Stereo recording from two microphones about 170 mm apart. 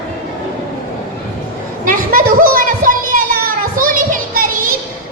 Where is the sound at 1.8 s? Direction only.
55° right (ahead or behind).